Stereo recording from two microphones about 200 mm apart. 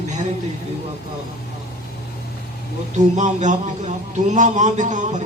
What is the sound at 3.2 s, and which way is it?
A man's voice, 40° right (ahead or behind).